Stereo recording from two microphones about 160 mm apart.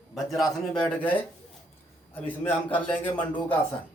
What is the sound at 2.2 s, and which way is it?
A man's voice, 10° left (ahead or behind).